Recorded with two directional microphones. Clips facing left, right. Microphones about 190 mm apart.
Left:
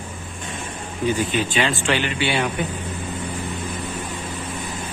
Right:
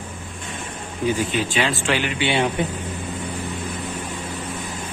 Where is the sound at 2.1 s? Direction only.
20° right (ahead or behind).